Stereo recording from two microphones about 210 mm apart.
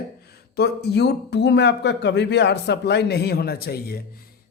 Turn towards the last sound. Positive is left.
turn(degrees=45)  # may be behind; listen again after turning